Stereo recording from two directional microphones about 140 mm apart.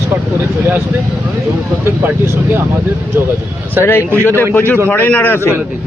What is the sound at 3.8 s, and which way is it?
Speech, 20° left (ahead or behind).